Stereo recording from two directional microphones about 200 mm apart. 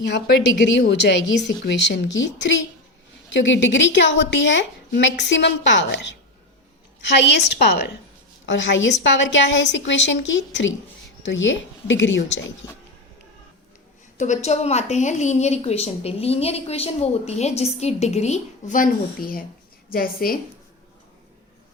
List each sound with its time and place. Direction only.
0.1 s a woman's voice: 60° left (ahead or behind)
7.2 s a woman's voice: 60° left (ahead or behind)
8.4 s a woman's voice: 65° left (ahead or behind)
14.2 s a woman's voice: 35° left (ahead or behind)